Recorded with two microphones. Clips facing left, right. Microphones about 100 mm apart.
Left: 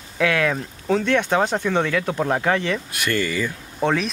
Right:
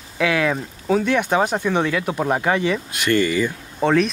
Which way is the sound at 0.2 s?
5° right (ahead or behind).